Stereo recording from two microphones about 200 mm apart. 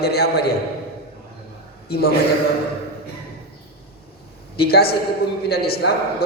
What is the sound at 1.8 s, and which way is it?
Speech, 50° left (ahead or behind).